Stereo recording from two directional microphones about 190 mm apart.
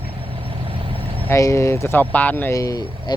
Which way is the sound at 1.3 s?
15° left (ahead or behind).